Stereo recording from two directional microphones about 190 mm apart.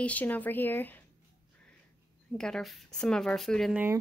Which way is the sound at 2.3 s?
5° left (ahead or behind).